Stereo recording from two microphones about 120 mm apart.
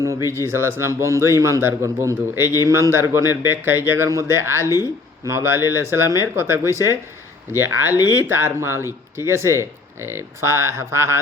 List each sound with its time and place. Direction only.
0.3 s speech: 20° right (ahead or behind)
4.6 s speech: 30° left (ahead or behind)
5.2 s speech: 25° right (ahead or behind)